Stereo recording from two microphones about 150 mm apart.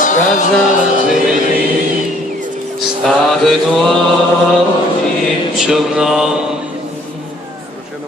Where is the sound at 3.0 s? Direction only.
Centre (ahead or behind).